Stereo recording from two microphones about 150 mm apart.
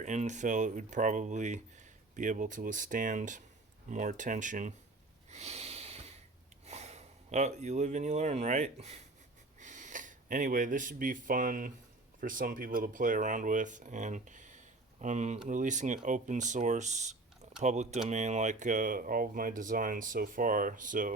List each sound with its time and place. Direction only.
0.0 s speech: 55° right (ahead or behind)
5.3 s a sound: 45° right (ahead or behind)
6.7 s speech: 50° right (ahead or behind)